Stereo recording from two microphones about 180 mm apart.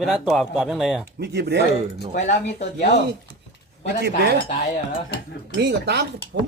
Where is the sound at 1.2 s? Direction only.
70° right (ahead or behind).